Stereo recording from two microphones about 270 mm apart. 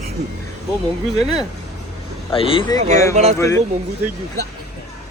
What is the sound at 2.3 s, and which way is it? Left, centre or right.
A man's voice, centre.